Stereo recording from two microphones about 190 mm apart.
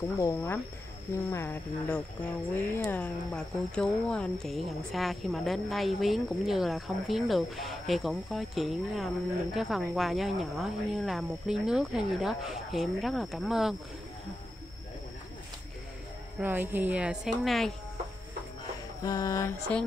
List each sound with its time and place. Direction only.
0.2 s speech: 15° left (ahead or behind); by 13.7 s centre (ahead or behind)
16.3 s speech: 10° right (ahead or behind)
19.0 s speech: 15° left (ahead or behind)